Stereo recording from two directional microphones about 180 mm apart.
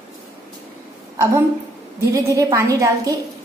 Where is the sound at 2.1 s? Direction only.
20° right (ahead or behind).